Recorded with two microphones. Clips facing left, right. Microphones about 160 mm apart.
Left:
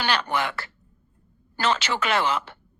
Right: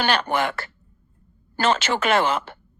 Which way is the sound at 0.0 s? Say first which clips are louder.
Right 3 dB; 50° right (ahead or behind).